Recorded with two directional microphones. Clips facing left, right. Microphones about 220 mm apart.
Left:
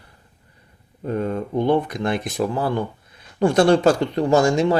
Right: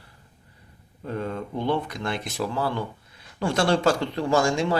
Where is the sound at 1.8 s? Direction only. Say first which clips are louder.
Left 7 dB; 20° left (ahead or behind).